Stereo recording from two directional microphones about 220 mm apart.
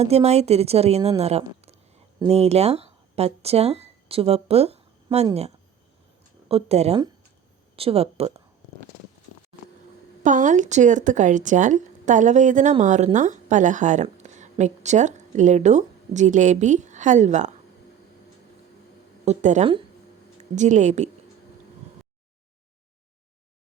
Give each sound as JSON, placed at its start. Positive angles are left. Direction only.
{"t": 0.0, "sound": "a woman's voice", "side_deg": -30}
{"t": 6.5, "sound": "a woman's voice", "side_deg": -30}
{"t": 10.2, "sound": "a woman's voice", "side_deg": -35}
{"t": 19.2, "sound": "speech", "side_deg": -30}